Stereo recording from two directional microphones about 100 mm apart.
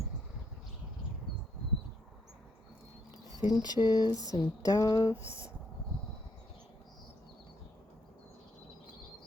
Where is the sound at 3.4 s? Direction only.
45° left (ahead or behind).